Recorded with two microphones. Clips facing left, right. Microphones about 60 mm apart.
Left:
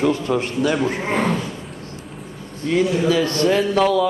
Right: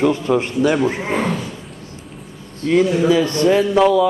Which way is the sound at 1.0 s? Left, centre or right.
Centre.